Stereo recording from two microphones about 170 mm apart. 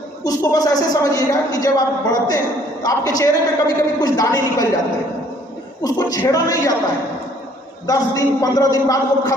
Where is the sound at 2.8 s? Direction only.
20° left (ahead or behind).